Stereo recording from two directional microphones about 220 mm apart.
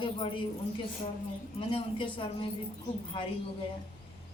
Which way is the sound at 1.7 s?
25° left (ahead or behind).